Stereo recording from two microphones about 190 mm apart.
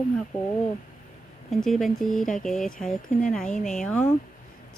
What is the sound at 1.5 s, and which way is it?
Speech, centre (ahead or behind).